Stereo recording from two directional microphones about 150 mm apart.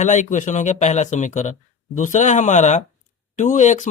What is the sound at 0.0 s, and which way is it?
A man's voice, 55° left (ahead or behind).